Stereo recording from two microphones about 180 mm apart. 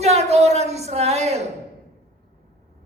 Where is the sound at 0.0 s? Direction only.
35° right (ahead or behind).